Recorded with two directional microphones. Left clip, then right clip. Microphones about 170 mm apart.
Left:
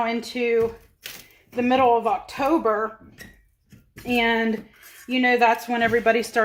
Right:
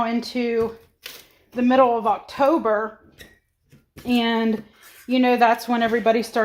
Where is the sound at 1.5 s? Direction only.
20° right (ahead or behind).